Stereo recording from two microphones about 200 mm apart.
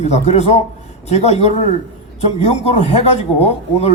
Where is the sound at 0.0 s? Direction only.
35° left (ahead or behind).